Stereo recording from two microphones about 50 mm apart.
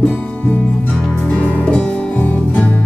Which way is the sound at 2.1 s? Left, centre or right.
Left.